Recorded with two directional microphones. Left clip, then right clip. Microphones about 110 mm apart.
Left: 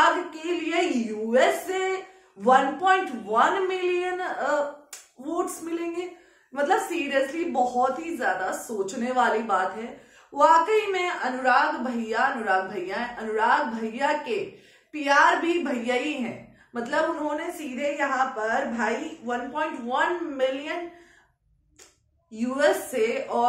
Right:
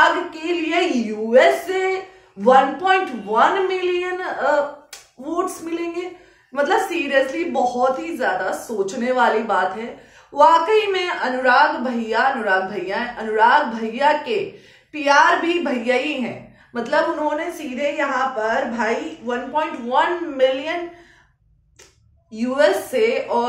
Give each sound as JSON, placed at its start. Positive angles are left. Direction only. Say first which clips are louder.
{"t": 0.0, "sound": "a sound", "louder": "right 5 dB", "side_deg": -30}
{"t": 1.3, "sound": "a woman's voice", "louder": "right 7 dB", "side_deg": -15}
{"t": 22.3, "sound": "a woman's voice", "louder": "right 6 dB", "side_deg": -15}